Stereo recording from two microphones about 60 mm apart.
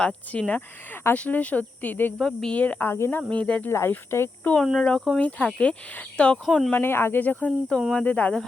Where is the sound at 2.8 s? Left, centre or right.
Left.